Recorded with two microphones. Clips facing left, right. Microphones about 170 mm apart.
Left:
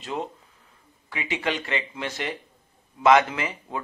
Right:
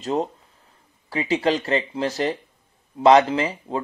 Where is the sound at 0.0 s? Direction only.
35° right (ahead or behind).